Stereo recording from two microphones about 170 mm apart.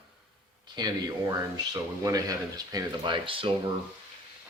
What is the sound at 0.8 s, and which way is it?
Speech, 25° right (ahead or behind).